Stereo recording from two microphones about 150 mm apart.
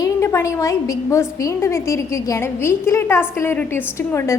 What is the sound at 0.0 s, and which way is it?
A woman's voice, 20° left (ahead or behind).